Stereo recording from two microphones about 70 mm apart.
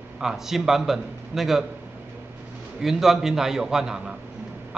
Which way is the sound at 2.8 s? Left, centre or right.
Centre.